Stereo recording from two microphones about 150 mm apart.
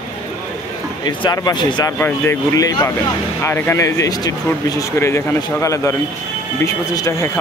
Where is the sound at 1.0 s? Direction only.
25° left (ahead or behind).